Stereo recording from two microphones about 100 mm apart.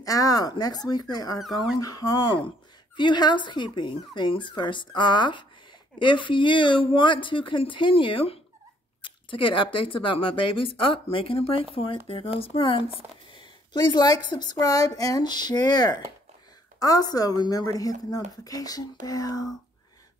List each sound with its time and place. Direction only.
0.0 s a woman's voice: 35° left (ahead or behind)
1.4 s speech: centre (ahead or behind)
1.8 s a woman's voice: 40° left (ahead or behind)
3.0 s speech: 50° left (ahead or behind)
13.3 s a woman's voice: 50° left (ahead or behind)